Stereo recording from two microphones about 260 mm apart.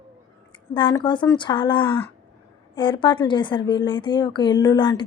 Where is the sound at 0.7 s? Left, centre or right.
Centre.